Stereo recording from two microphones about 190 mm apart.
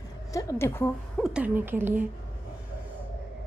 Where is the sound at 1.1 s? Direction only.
5° right (ahead or behind).